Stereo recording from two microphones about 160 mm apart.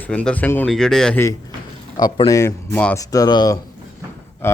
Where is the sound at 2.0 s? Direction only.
25° left (ahead or behind).